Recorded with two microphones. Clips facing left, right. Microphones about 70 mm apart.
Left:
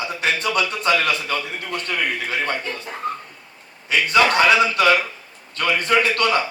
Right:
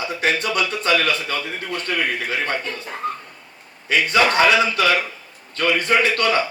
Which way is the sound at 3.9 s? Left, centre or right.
Right.